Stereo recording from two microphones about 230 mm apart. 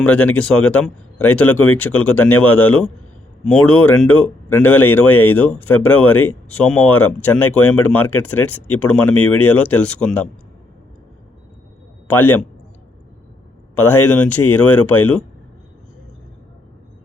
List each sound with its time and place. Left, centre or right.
0.0 s speech: centre
9.1 s speech: left
9.6 s speech: centre
12.0 s speech: centre
13.7 s speech: centre